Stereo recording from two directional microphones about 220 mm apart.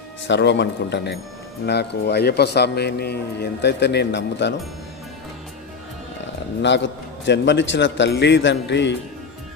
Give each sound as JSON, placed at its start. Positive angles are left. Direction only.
{"t": 0.3, "sound": "a man's voice", "side_deg": 55}
{"t": 6.6, "sound": "a man's voice", "side_deg": 55}